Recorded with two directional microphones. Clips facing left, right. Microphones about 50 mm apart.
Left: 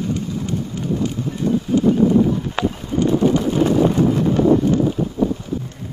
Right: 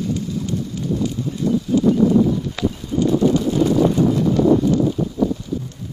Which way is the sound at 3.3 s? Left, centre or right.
Left.